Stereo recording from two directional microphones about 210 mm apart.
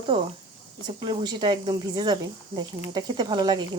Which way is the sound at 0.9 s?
20° right (ahead or behind).